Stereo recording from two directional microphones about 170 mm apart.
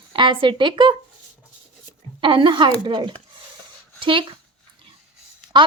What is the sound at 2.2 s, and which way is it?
Speech, 30° right (ahead or behind).